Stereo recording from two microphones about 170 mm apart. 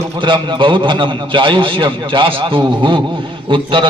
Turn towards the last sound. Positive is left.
turn(degrees=-30)  # may be behind; listen again after turning